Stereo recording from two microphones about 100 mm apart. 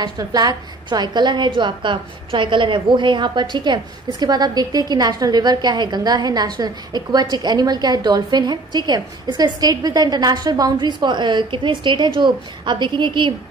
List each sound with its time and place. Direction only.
0.0 s a woman's voice: 40° right (ahead or behind)